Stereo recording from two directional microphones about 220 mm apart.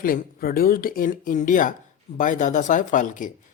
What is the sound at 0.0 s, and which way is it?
Speech, 40° left (ahead or behind).